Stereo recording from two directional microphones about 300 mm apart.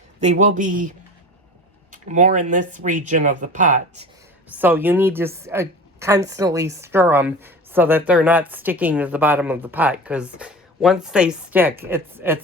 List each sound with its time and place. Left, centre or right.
0.2 s speech: right
4.5 s a woman's voice: centre